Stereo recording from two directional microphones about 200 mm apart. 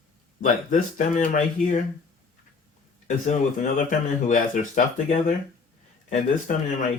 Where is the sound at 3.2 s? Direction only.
40° left (ahead or behind).